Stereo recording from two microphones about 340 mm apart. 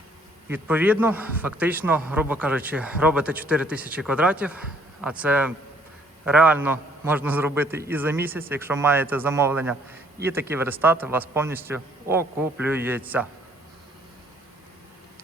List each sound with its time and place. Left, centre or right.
0.5 s a man's voice: centre